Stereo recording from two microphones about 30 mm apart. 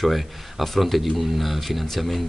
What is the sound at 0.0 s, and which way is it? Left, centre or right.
Speech, centre.